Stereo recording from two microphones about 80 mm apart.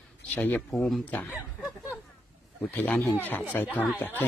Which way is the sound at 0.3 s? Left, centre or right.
Left.